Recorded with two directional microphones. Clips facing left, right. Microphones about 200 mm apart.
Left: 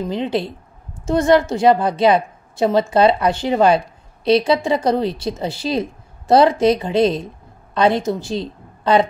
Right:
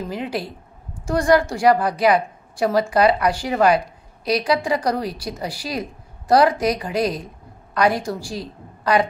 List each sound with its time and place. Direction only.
0.1 s a woman's voice: 25° left (ahead or behind)